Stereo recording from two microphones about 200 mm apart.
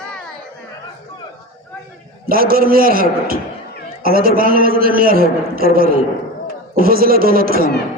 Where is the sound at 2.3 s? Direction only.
45° right (ahead or behind).